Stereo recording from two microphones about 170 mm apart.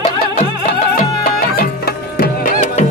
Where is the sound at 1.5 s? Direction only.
60° left (ahead or behind).